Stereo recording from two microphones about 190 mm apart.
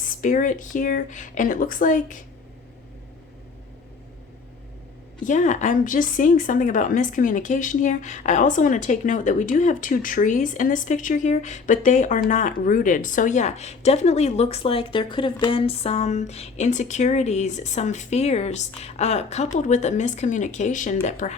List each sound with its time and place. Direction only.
0.0 s speech: 45° left (ahead or behind)
5.2 s a woman's voice: 40° left (ahead or behind)